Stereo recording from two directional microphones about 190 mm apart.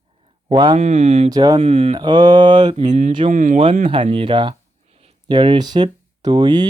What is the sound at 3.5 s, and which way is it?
Speech, 30° right (ahead or behind).